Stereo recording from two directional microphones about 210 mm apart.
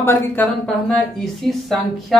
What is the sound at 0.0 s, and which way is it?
A woman's voice, 10° left (ahead or behind).